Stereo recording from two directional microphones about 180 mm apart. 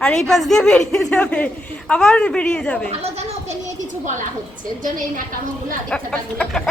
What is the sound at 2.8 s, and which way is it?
Speech, 35° right (ahead or behind).